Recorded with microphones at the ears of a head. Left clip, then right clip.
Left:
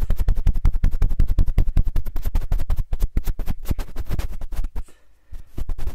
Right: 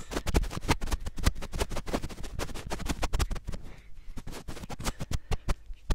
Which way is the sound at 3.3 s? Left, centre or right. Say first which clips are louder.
Left 9 dB; left.